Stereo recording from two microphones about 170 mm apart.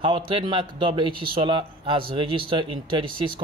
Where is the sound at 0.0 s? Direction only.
30° right (ahead or behind).